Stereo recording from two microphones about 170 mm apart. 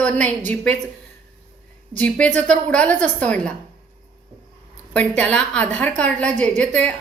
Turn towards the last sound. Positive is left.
turn(degrees=10)  # may be behind; listen again after turning